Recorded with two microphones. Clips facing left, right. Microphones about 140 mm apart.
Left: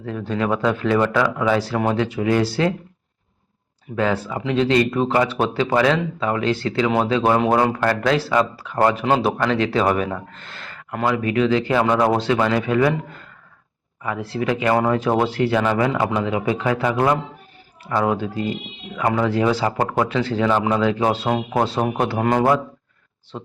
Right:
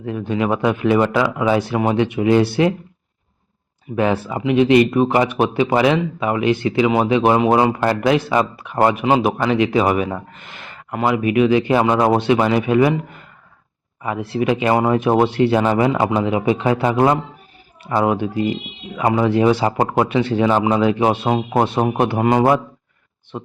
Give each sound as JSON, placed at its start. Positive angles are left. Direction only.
{"t": 0.0, "sound": "speech", "side_deg": -15}
{"t": 3.9, "sound": "speech", "side_deg": -20}
{"t": 22.2, "sound": "speech", "side_deg": -10}